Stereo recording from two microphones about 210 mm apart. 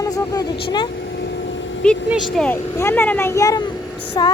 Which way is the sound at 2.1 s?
Centre (ahead or behind).